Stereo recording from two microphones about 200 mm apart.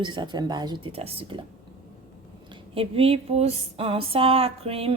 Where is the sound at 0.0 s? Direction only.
25° right (ahead or behind).